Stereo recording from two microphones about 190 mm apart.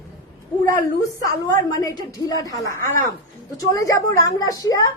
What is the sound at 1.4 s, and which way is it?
A woman's voice, 20° left (ahead or behind).